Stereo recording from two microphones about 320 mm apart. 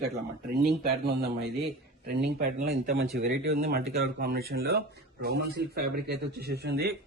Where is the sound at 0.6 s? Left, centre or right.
Right.